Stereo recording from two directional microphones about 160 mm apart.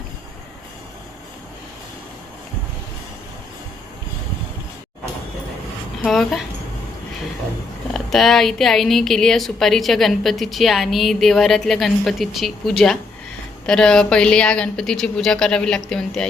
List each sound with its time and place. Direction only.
6.0 s speech: centre (ahead or behind)
7.9 s speech: centre (ahead or behind)